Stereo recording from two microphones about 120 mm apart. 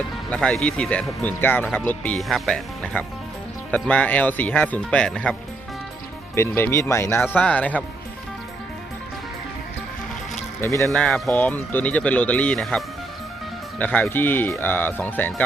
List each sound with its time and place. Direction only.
0.3 s speech: 10° left (ahead or behind)
2.1 s speech: centre (ahead or behind)
6.3 s speech: 20° left (ahead or behind)
10.6 s speech: 20° left (ahead or behind)
10.9 s speech: 5° left (ahead or behind)